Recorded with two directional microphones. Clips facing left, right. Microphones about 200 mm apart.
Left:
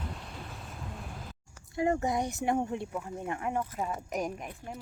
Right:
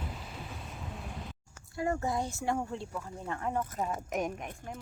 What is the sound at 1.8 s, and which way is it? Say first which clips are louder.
Speech: left 3 dB; 20° left (ahead or behind).